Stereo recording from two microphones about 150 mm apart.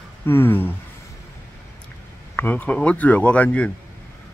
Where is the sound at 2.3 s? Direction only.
10° left (ahead or behind).